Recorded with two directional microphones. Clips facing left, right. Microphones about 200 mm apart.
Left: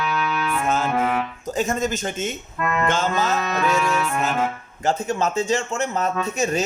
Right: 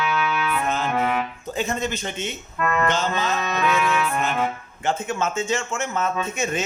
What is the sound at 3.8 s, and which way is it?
Music, 45° left (ahead or behind).